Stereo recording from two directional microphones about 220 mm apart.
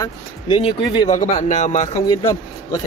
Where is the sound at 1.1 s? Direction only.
30° left (ahead or behind).